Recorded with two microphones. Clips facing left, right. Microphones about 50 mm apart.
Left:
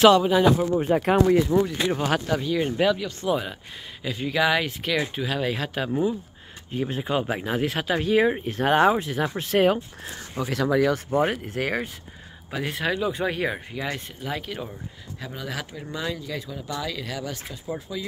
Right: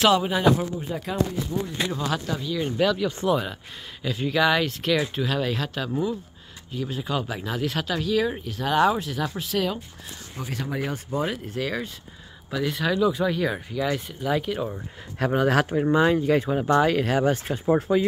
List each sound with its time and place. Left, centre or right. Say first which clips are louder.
0.1 s speech: left 2 dB; centre
0.7 s speech: left 7 dB; left
1.9 s speech: left 4 dB; left
2.6 s speech: right 2 dB; centre
3.3 s speech: left 1 dB; centre
6.7 s speech: left 2 dB; left; by 7.9 s centre
7.9 s speech: left 5 dB; left
10.4 s speech: left 8 dB; left
11.1 s speech: left 4 dB; left
12.4 s speech: right 2 dB; left
13.7 s speech: right 4 dB; centre
14.3 s speech: right 7 dB; centre
15.3 s speech: right 13 dB; right
15.9 s speech: right 10 dB; right